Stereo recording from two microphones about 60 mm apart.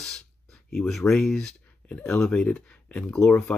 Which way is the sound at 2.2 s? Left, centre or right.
Centre.